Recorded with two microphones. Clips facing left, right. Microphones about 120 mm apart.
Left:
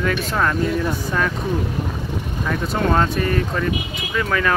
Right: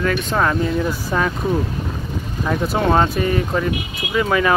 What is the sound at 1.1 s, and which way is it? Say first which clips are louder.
Speech: right 3 dB; 15° right (ahead or behind).